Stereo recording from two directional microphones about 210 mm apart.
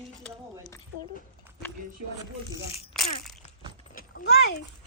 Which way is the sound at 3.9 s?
45° left (ahead or behind).